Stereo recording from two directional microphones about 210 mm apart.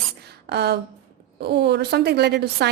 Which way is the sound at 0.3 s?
50° right (ahead or behind).